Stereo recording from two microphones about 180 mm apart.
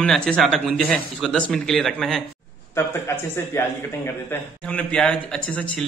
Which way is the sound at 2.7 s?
15° left (ahead or behind).